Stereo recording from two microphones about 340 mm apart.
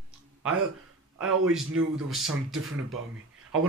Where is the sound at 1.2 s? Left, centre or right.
Right.